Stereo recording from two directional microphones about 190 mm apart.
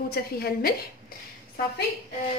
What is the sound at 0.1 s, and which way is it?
Speech, 55° left (ahead or behind).